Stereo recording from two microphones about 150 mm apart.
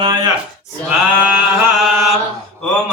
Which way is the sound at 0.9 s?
10° right (ahead or behind).